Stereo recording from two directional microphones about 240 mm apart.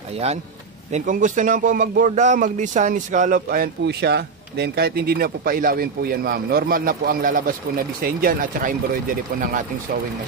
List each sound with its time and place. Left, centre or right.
0.9 s speech: right